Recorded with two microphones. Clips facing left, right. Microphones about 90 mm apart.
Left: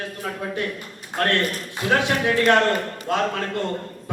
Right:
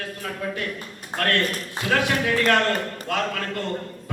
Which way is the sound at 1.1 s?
25° left (ahead or behind).